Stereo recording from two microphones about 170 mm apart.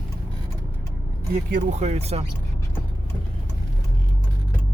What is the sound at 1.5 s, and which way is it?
Speech, 45° right (ahead or behind).